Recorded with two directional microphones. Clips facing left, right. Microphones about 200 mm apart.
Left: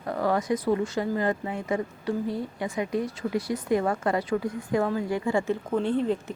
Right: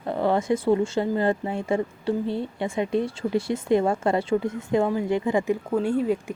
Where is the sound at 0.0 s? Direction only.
25° right (ahead or behind).